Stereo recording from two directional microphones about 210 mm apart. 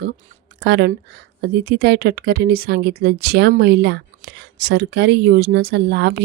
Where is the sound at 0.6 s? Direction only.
50° right (ahead or behind).